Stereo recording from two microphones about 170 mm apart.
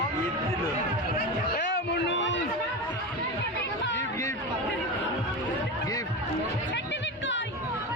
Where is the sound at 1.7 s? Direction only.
90° left.